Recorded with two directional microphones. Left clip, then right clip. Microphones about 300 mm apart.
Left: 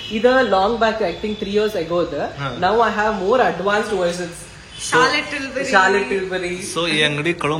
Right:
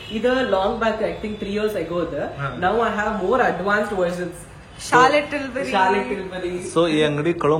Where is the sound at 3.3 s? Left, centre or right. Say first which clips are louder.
Left 1 dB; left.